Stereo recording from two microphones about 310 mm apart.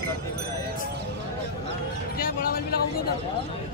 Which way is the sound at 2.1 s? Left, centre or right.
Left.